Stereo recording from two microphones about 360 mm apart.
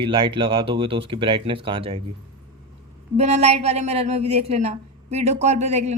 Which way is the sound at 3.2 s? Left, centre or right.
Centre.